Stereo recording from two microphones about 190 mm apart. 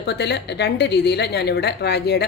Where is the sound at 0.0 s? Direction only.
60° left (ahead or behind).